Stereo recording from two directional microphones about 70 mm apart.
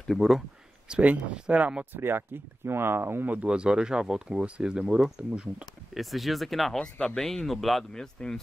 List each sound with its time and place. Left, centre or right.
0.0 s speech: centre
0.8 s speech: centre
1.9 s speech: right; by 5.7 s centre
5.9 s speech: centre